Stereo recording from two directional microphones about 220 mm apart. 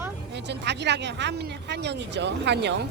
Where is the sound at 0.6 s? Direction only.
50° right (ahead or behind).